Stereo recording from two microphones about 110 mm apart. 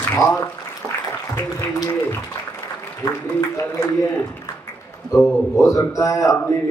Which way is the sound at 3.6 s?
30° left (ahead or behind).